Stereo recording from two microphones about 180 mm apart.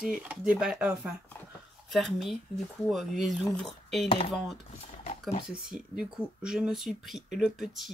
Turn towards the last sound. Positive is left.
turn(degrees=0)  # may be behind; listen again after turning